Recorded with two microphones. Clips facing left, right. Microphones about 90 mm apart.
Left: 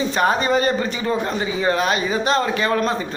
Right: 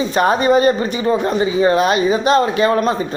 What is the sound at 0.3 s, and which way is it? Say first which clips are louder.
Speech: right 5 dB; 15° right (ahead or behind).